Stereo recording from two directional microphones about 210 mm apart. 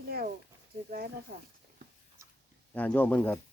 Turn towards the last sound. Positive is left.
turn(degrees=10)  # may be behind; listen again after turning